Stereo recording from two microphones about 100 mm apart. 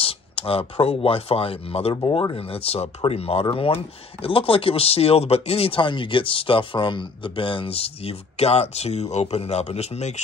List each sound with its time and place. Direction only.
0.0 s speech: 70° left (ahead or behind)
3.4 s a man's voice: 70° left (ahead or behind); by 10.0 s 90° left